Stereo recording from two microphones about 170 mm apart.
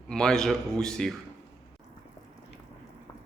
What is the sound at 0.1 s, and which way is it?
A man's voice, 5° left (ahead or behind).